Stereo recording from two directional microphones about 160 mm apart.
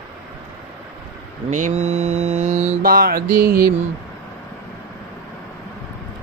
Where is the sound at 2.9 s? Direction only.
65° right (ahead or behind).